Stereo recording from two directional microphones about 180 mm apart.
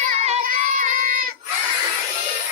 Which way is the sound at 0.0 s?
45° right (ahead or behind).